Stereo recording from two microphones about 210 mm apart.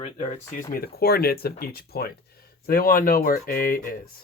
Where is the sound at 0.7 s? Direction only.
45° left (ahead or behind).